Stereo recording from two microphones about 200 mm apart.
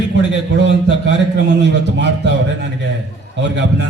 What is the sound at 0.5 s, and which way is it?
A man's voice, 60° right (ahead or behind).